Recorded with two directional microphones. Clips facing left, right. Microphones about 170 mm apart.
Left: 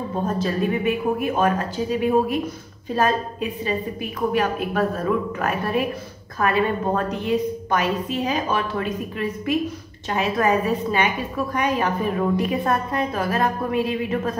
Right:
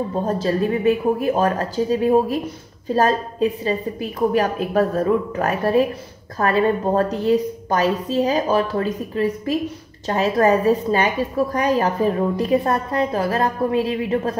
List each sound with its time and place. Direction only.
0.3 s a woman's voice: 35° right (ahead or behind)